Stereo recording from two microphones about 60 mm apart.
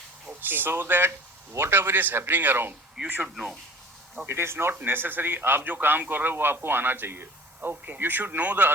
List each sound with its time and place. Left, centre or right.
0.3 s a man's voice: right
3.0 s speech: right
3.3 s speech: centre
4.3 s a man's voice: right